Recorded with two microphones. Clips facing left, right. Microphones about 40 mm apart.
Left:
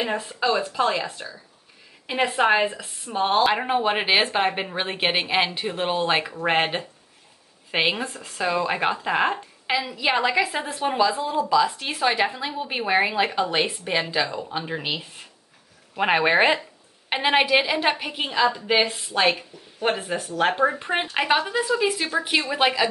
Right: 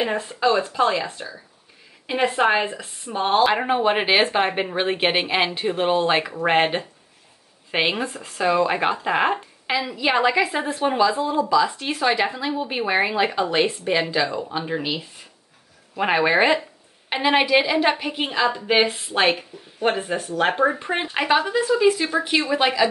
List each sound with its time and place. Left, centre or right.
0.0 s a woman's voice: centre
0.5 s a woman's voice: centre
16.0 s a woman's voice: centre
18.2 s a woman's voice: centre
20.0 s a woman's voice: centre
20.8 s a woman's voice: centre